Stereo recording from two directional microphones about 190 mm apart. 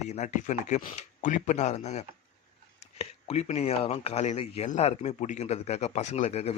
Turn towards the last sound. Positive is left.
turn(degrees=35)  # may be behind; listen again after turning